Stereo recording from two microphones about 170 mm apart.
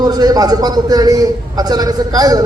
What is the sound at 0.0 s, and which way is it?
A man's voice, 20° right (ahead or behind).